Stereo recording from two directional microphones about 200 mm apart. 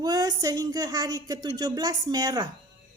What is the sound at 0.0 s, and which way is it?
Speech, 20° right (ahead or behind).